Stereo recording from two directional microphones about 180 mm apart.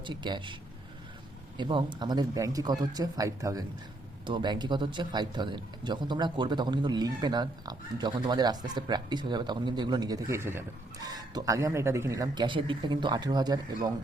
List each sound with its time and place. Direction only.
0.0 s speech: 25° right (ahead or behind)
1.5 s speech: 25° right (ahead or behind)